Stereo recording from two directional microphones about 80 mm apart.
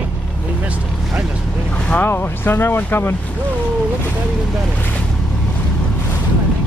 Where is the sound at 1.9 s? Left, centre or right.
Left.